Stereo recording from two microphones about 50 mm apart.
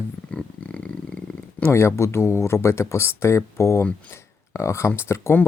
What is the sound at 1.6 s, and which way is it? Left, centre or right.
Speech, left.